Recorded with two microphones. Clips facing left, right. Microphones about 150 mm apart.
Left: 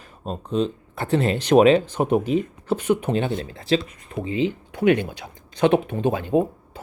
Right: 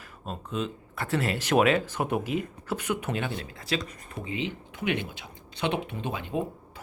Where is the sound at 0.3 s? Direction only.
30° left (ahead or behind).